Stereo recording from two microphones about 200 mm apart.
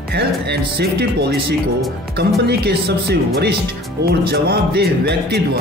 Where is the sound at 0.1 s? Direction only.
55° right (ahead or behind).